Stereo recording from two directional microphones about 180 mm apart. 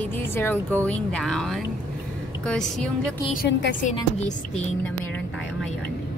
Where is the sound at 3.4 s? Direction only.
75° left (ahead or behind).